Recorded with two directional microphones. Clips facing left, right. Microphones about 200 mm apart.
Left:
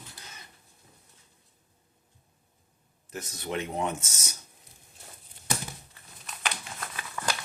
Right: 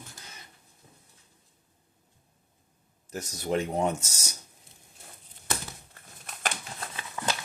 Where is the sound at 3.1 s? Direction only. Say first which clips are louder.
Right 5 dB; 40° right (ahead or behind).